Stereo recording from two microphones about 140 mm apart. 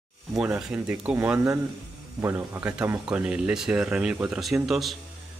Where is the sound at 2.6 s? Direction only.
10° right (ahead or behind).